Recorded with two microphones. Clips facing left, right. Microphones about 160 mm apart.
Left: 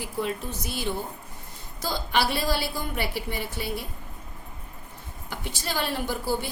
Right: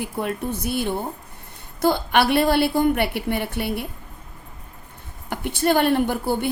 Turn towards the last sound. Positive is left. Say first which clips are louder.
# right 6 dB
turn(degrees=-55)  # may be behind; listen again after turning